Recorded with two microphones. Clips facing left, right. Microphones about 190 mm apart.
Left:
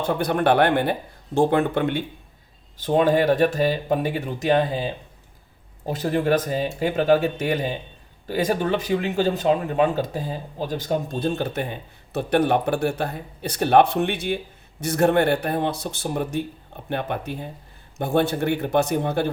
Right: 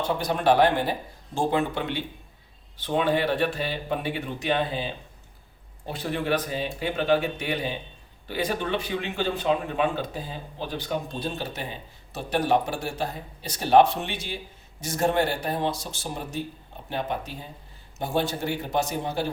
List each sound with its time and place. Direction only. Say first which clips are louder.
0.2 s speech: left 2 dB; 60° left (ahead or behind)